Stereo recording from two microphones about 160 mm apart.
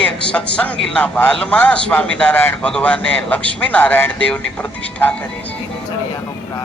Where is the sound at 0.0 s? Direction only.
5° left (ahead or behind).